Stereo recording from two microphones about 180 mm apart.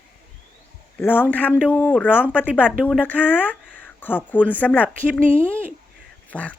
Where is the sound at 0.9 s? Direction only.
10° left (ahead or behind).